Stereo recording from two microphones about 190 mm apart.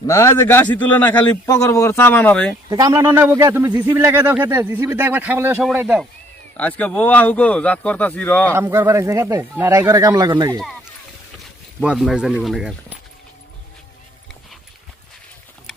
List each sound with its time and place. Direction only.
0.1 s speech: 15° left (ahead or behind)
2.6 s speech: 15° right (ahead or behind)
6.6 s speech: 10° left (ahead or behind)
8.5 s speech: 15° right (ahead or behind)
11.8 s speech: 5° right (ahead or behind)